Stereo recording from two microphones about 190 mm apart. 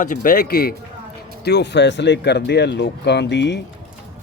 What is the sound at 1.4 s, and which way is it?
Speech, 65° left (ahead or behind).